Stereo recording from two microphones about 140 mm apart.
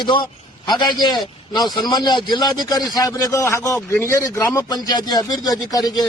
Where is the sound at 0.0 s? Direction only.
35° left (ahead or behind).